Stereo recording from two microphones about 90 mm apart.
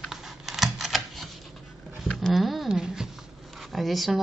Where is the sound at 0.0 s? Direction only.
Centre (ahead or behind).